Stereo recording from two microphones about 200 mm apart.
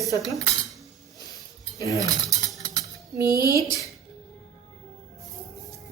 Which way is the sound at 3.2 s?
15° right (ahead or behind).